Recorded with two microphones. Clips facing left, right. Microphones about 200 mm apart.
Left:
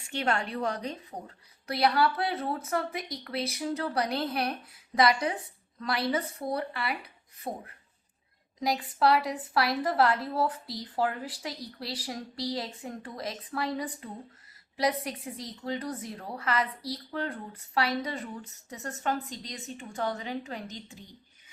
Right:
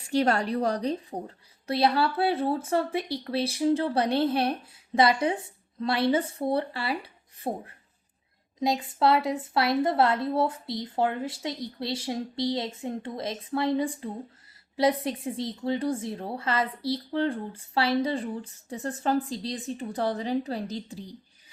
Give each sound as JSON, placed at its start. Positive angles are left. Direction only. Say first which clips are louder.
{"t": 0.1, "sound": "a woman's voice", "louder": "right 6 dB", "side_deg": -35}